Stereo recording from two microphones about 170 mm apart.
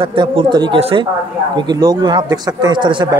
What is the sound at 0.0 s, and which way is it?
Speech, 30° right (ahead or behind).